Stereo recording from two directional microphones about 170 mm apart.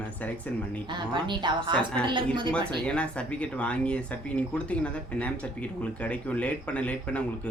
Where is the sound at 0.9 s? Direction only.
25° right (ahead or behind).